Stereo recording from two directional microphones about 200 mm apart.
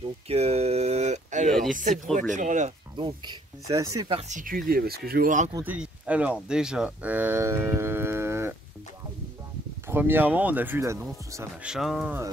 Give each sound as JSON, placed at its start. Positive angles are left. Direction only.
{"t": 0.3, "sound": "a sound", "side_deg": -30}
{"t": 2.3, "sound": "speech", "side_deg": -40}
{"t": 3.0, "sound": "speech", "side_deg": -25}
{"t": 4.2, "sound": "speech", "side_deg": -40}
{"t": 5.5, "sound": "speech", "side_deg": -10}
{"t": 9.8, "sound": "speech", "side_deg": -10}